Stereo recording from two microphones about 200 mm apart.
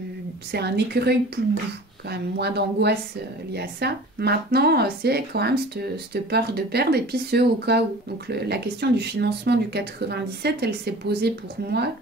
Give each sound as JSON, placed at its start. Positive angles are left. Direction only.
{"t": 0.5, "sound": "speech", "side_deg": -55}